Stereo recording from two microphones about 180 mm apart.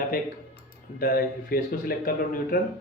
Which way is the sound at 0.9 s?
55° left (ahead or behind).